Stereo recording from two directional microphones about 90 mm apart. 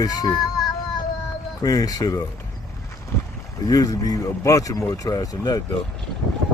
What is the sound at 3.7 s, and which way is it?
Speech, 45° left (ahead or behind).